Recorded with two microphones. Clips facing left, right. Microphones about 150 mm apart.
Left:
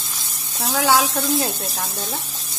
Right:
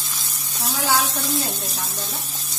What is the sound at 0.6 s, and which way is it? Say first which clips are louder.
Sizzle: left 4 dB; 80° left.